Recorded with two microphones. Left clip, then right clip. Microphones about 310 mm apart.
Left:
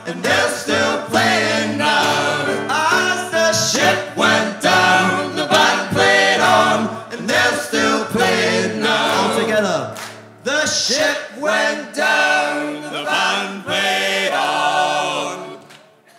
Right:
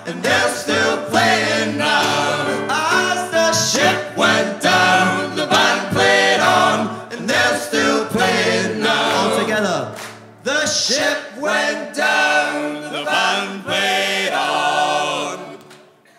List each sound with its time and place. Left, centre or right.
0.2 s music: centre